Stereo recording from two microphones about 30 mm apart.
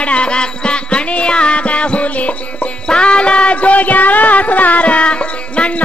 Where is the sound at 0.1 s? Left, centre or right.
Left.